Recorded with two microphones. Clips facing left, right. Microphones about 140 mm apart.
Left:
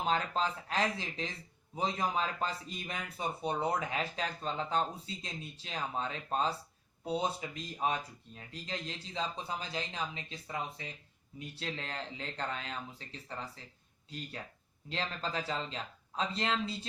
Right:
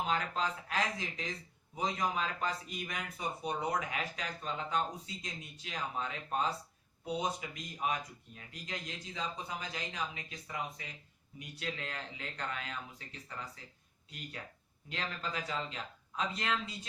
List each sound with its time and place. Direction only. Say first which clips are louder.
0.1 s speech: left 2 dB; 30° left (ahead or behind)
14.8 s speech: left 3 dB; 30° left (ahead or behind)